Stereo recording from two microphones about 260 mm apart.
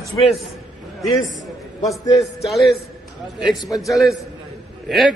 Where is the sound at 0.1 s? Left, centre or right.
Left.